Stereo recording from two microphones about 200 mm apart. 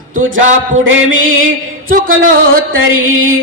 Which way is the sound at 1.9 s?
45° right (ahead or behind).